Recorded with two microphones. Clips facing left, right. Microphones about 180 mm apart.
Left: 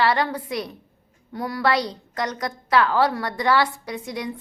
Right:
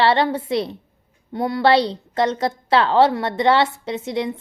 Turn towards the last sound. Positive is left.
turn(degrees=-25)  # may be behind; listen again after turning